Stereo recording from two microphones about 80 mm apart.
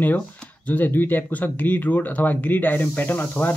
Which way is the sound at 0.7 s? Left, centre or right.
Left.